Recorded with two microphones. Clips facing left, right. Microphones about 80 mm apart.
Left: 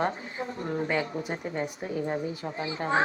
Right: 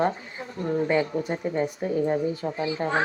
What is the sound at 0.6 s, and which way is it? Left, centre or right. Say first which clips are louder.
Speech: right 7 dB; centre.